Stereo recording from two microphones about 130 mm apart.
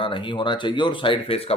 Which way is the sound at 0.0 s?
40° left (ahead or behind).